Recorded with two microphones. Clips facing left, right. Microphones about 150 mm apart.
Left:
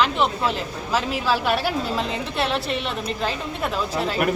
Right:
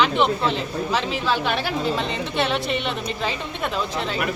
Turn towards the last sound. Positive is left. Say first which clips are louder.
# left 1 dB
turn(degrees=5)  # may be behind; listen again after turning